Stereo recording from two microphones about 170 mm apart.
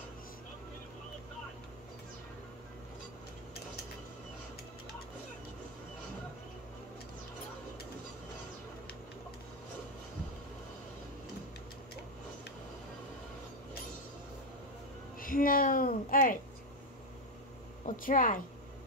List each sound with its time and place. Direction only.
15.1 s a woman's voice: 55° left (ahead or behind)
17.8 s speech: 50° left (ahead or behind)